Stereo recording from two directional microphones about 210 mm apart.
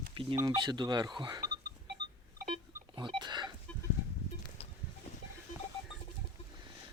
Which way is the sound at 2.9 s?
20° right (ahead or behind).